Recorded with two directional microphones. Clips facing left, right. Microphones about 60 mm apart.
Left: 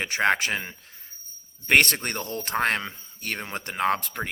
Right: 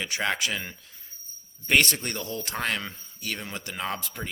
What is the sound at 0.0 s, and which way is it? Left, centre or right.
Speech, left.